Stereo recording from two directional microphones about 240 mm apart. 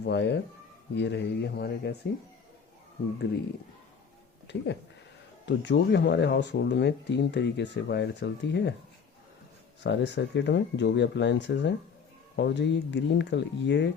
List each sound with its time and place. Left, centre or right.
0.0 s speech: left
4.4 s speech: left
9.8 s speech: left